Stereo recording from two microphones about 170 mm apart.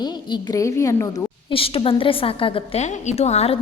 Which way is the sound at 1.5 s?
35° left (ahead or behind).